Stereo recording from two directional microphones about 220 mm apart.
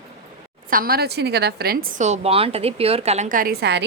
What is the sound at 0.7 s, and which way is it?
A woman's voice, 40° right (ahead or behind).